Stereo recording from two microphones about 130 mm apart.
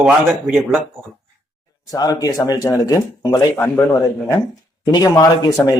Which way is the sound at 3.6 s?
15° left (ahead or behind).